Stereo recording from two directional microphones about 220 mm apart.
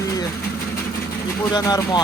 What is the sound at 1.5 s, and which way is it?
Speech, 15° left (ahead or behind).